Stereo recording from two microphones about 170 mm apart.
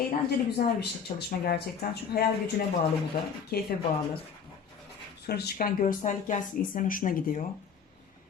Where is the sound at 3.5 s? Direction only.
70° left (ahead or behind).